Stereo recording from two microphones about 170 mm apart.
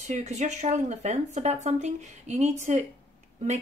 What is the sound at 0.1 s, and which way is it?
Speech, 45° right (ahead or behind).